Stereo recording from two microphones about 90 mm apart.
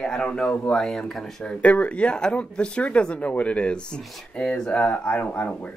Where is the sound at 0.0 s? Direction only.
10° left (ahead or behind).